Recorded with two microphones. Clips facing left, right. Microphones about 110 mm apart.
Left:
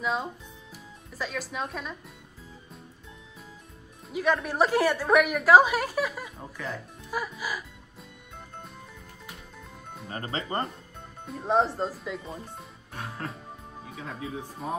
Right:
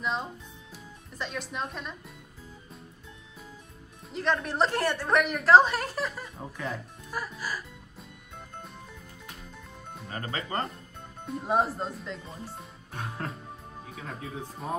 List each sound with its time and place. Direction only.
0.0 s speech: centre (ahead or behind)
4.1 s a woman's voice: 10° left (ahead or behind)
10.1 s speech: 30° left (ahead or behind)
11.2 s speech: 5° right (ahead or behind)